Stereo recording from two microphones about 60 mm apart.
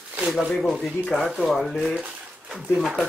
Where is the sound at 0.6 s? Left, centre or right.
Centre.